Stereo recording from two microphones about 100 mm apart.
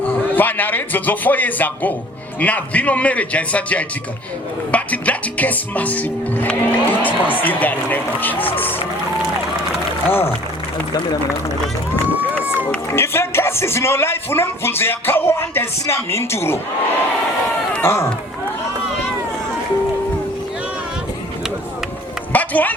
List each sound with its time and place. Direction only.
0.0 s a man's voice: 20° left (ahead or behind)
10.1 s a man's voice: 25° left (ahead or behind)
12.9 s a man's voice: 25° left (ahead or behind)
17.8 s a man's voice: 25° left (ahead or behind)
22.3 s bow-wow: 15° left (ahead or behind)